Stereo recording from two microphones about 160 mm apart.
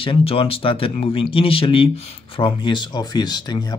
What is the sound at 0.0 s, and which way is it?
Speech, 35° left (ahead or behind).